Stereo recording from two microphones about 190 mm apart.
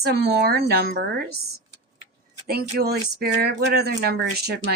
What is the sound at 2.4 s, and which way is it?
A woman's voice, 55° right (ahead or behind).